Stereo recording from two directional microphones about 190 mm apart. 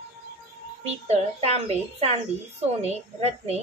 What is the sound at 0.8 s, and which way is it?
Speech, 35° right (ahead or behind).